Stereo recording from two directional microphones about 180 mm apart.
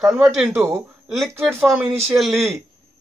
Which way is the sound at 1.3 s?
15° right (ahead or behind).